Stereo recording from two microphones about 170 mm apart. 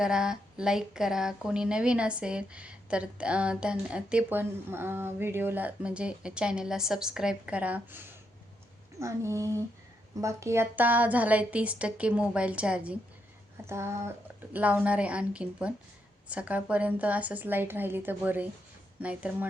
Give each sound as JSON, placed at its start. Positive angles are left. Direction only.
{"t": 0.0, "sound": "a woman's voice", "side_deg": -5}